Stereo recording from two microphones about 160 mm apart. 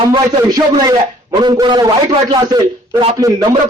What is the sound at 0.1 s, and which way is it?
A man's voice, 25° right (ahead or behind).